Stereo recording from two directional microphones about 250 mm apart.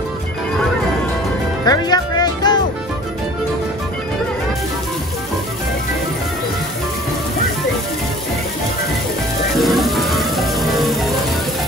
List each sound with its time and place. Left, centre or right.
1.7 s music: centre
9.6 s music: centre